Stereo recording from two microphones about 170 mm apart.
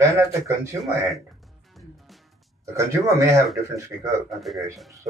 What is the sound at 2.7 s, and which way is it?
Speech, 15° right (ahead or behind).